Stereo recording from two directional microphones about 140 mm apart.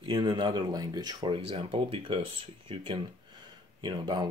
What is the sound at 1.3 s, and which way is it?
Speech, 40° right (ahead or behind).